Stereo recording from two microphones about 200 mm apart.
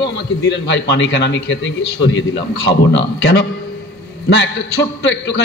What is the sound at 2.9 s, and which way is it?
Speech, 60° left (ahead or behind).